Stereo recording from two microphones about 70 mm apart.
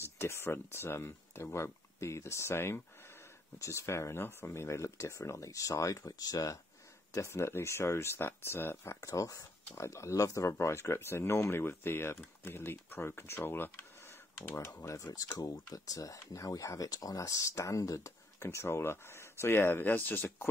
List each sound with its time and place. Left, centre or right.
0.2 s speech: left
7.1 s speech: left
9.1 s speech: left
15.3 s speech: left